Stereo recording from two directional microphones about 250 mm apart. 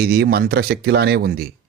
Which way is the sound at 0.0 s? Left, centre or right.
Right.